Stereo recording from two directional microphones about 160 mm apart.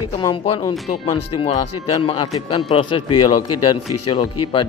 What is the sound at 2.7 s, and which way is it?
Speech, 35° left (ahead or behind).